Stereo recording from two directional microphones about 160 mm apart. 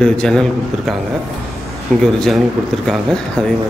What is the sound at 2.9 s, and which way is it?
Speech, 5° left (ahead or behind).